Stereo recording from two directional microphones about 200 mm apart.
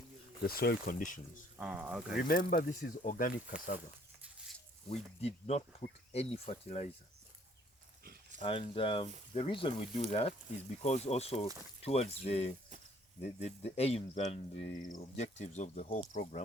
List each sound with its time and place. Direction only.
0.4 s speech: 50° left (ahead or behind)
1.5 s speech: 5° right (ahead or behind)
2.2 s speech: 40° left (ahead or behind)
5.2 s speech: 30° left (ahead or behind)
8.0 s a sound: 50° right (ahead or behind)
8.4 s speech: 25° left (ahead or behind)